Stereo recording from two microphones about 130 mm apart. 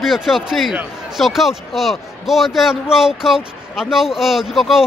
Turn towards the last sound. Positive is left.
turn(degrees=0)  # may be behind; listen again after turning